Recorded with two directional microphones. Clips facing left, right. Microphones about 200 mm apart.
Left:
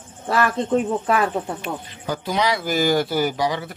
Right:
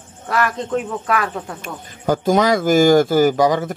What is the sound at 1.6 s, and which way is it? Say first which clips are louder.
Speech: left 3 dB; 45° right (ahead or behind).